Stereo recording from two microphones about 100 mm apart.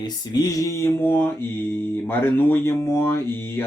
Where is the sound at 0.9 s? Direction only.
20° left (ahead or behind).